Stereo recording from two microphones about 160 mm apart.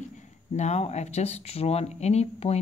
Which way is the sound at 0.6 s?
45° left (ahead or behind).